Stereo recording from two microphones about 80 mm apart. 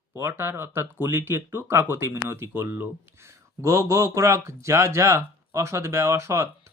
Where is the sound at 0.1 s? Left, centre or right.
Right.